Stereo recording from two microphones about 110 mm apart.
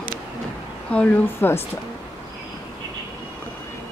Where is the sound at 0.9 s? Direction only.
15° left (ahead or behind).